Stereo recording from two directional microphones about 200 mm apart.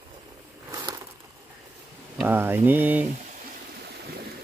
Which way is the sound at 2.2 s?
10° right (ahead or behind).